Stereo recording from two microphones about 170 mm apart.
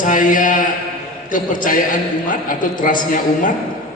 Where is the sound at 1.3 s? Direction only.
50° left (ahead or behind).